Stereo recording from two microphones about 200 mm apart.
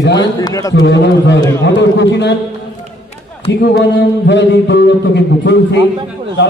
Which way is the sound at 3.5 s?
55° left (ahead or behind).